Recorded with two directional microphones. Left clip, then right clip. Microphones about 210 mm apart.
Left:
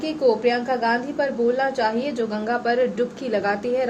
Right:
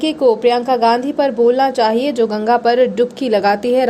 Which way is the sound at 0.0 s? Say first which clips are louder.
Right 7 dB; 40° right (ahead or behind).